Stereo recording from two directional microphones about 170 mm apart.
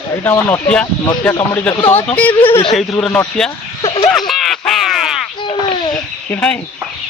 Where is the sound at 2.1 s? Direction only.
10° left (ahead or behind).